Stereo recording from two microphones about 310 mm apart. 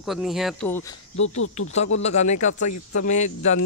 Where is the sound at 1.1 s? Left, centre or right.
Left.